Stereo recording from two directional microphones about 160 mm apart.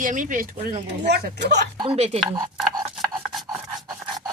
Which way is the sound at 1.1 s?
90° right.